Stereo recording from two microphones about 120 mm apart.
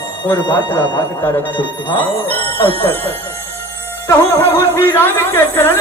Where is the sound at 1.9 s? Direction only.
15° left (ahead or behind).